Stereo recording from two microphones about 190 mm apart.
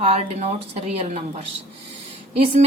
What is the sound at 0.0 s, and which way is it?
Speech, 30° right (ahead or behind).